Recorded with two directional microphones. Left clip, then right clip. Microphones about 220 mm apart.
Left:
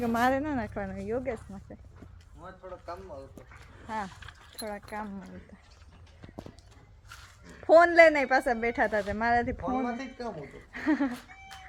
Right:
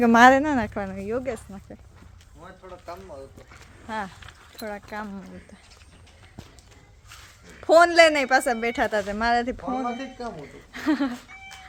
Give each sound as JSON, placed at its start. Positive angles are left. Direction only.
{"t": 0.0, "sound": "speech", "side_deg": -50}
{"t": 7.6, "sound": "speech", "side_deg": -10}
{"t": 10.0, "sound": "speech", "side_deg": 45}
{"t": 10.7, "sound": "speech", "side_deg": -15}